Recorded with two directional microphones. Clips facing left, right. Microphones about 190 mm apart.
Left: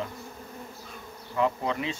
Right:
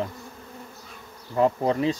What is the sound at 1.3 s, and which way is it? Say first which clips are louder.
Bee: right 5 dB; 40° right (ahead or behind).